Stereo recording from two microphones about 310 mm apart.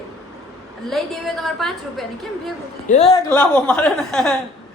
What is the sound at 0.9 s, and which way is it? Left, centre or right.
A man's voice, centre.